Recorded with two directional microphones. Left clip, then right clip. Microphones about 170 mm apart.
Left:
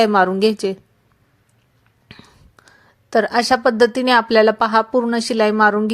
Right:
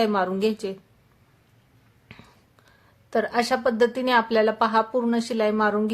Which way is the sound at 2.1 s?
20° left (ahead or behind).